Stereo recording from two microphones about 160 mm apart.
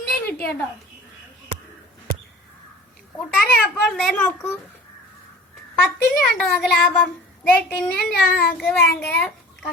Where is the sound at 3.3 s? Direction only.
5° left (ahead or behind).